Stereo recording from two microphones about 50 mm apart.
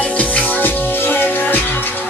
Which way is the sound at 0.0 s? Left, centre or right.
Left.